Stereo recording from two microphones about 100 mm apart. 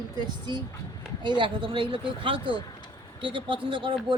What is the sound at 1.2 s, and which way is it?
Speech, 50° right (ahead or behind).